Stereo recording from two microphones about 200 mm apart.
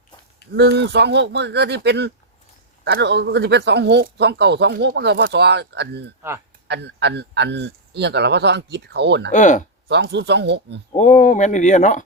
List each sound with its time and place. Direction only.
0.5 s speech: 60° right (ahead or behind)
9.3 s speech: 40° left (ahead or behind)
9.9 s speech: 60° right (ahead or behind)
10.9 s speech: 40° left (ahead or behind)